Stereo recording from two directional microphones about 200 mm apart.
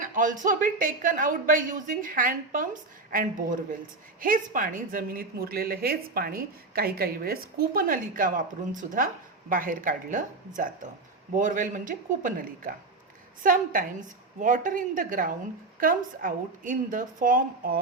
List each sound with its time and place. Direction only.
0.0 s a woman's voice: 40° right (ahead or behind)